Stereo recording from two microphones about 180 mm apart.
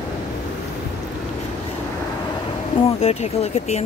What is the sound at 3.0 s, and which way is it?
Speech, 35° left (ahead or behind).